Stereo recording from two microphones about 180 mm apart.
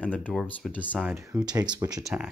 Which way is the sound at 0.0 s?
5° left (ahead or behind).